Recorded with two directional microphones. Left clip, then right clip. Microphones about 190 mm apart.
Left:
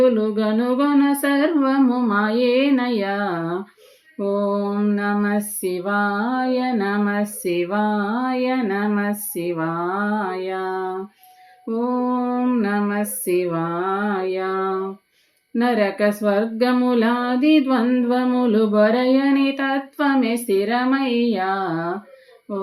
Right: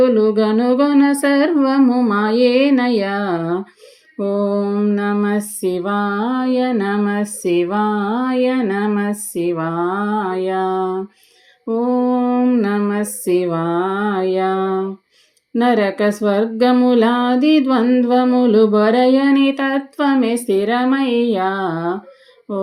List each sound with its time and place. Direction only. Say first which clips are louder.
0.0 s mantra: right 4 dB; 30° right (ahead or behind)